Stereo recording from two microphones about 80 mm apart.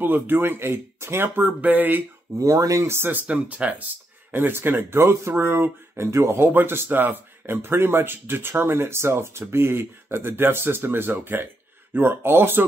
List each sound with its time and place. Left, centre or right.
0.0 s speech: right
2.3 s speech: right
3.3 s speech: centre